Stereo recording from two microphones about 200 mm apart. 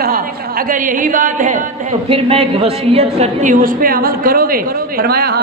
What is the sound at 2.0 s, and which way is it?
A woman's voice, 30° right (ahead or behind).